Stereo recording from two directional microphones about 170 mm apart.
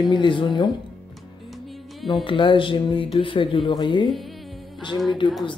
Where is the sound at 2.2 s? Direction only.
30° left (ahead or behind).